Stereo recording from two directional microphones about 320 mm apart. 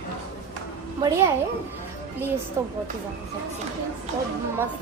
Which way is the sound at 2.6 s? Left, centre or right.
Centre.